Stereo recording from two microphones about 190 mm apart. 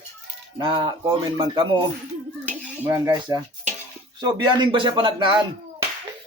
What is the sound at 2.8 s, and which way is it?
A man's voice, 15° right (ahead or behind).